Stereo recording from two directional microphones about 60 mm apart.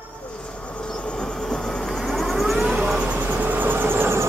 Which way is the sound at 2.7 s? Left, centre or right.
Centre.